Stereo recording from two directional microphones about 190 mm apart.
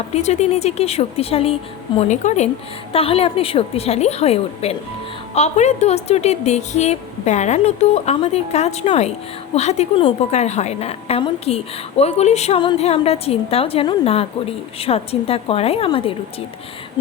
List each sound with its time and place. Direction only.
0.1 s a woman's voice: 35° left (ahead or behind)